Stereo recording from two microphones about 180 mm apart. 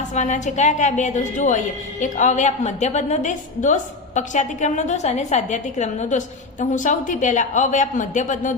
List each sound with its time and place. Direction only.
0.1 s a woman's voice: 40° left (ahead or behind)